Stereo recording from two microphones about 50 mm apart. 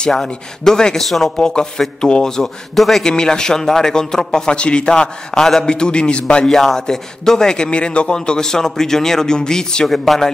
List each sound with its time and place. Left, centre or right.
0.1 s a man's voice: centre
1.4 s a man's voice: centre
6.4 s a man's voice: centre